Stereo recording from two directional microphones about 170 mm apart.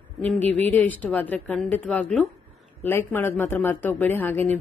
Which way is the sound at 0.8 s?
10° left (ahead or behind).